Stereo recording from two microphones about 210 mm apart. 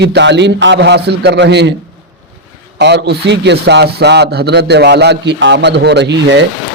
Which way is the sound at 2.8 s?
55° right (ahead or behind).